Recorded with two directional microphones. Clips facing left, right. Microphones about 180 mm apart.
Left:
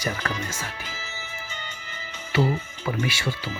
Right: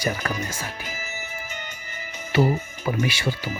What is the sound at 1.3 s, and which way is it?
Music, 10° right (ahead or behind).